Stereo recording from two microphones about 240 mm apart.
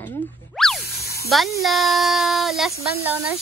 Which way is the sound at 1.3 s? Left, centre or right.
Centre.